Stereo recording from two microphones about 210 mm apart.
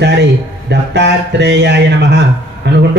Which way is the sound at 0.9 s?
55° right (ahead or behind).